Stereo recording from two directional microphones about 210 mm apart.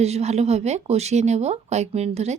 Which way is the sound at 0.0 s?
30° right (ahead or behind).